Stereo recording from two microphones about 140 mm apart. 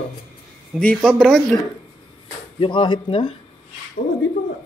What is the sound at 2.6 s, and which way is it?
Speech, 35° left (ahead or behind).